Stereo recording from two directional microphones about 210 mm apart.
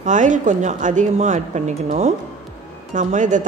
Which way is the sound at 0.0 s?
35° right (ahead or behind).